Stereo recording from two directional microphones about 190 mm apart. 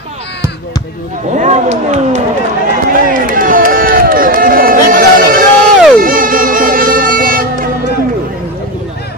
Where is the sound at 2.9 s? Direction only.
45° right (ahead or behind).